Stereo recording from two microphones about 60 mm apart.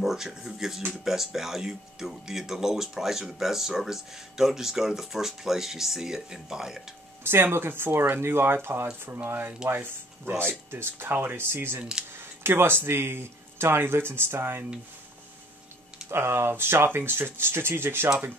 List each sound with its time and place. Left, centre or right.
0.0 s speech: centre
7.2 s speech: right
16.1 s speech: right